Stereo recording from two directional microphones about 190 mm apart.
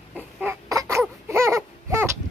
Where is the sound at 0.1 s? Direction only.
10° right (ahead or behind).